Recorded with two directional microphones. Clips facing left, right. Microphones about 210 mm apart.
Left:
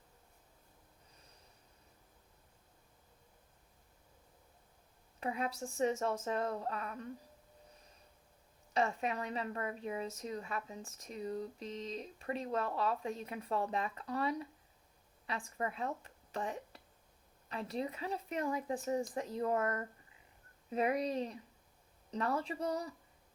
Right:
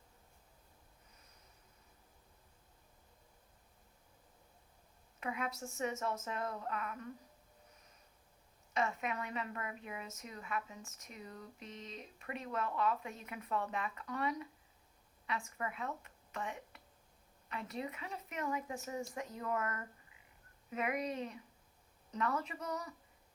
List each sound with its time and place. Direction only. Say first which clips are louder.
5.2 s a woman's voice: left 3 dB; 35° left (ahead or behind)
8.7 s a woman's voice: left 3 dB; 35° left (ahead or behind)